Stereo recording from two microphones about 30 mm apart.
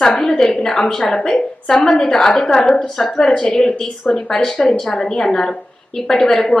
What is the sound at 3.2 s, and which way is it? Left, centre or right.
A woman's voice, left.